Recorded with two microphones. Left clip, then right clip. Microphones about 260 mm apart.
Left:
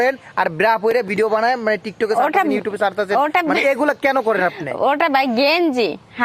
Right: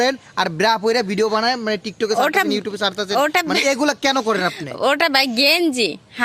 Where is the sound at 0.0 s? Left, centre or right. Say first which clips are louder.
Left 1 dB; right.